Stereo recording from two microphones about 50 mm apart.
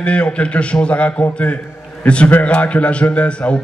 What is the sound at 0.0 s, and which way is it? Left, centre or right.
A man's voice, left.